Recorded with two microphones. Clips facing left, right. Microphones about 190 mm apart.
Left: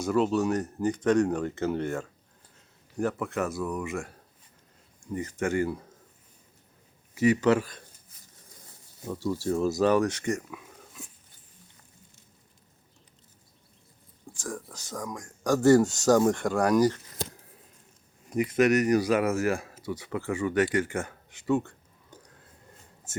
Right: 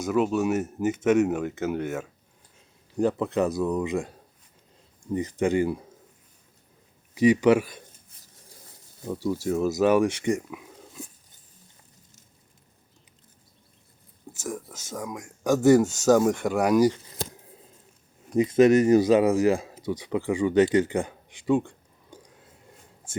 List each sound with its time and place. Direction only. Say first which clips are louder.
0.0 s speech: right 1 dB; centre (ahead or behind)
3.0 s speech: right 5 dB; 20° right (ahead or behind)
5.1 s speech: right 4 dB; 15° right (ahead or behind)
7.1 s speech: right 4 dB; 15° right (ahead or behind)
9.0 s speech: right 2 dB; 15° right (ahead or behind)
9.6 s speech: right 1 dB; centre (ahead or behind)
9.8 s speech: right 4 dB; 10° right (ahead or behind)
14.3 s speech: right 3 dB; 5° right (ahead or behind)
14.7 s speech: right 2 dB; 20° right (ahead or behind)
14.9 s speech: right 2 dB; 5° right (ahead or behind)
18.3 s speech: right 5 dB; 25° right (ahead or behind)